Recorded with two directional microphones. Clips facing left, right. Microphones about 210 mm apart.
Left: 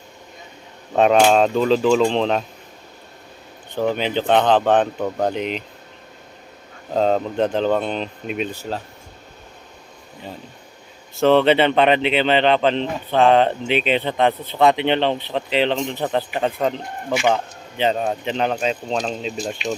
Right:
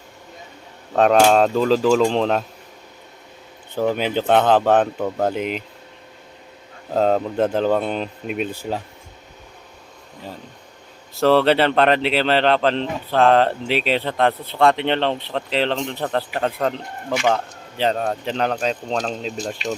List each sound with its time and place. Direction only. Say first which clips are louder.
0.9 s speech: even; centre (ahead or behind)
3.8 s speech: even; 10° right (ahead or behind)
6.9 s speech: even; 5° right (ahead or behind)
11.2 s speech: left 1 dB; centre (ahead or behind)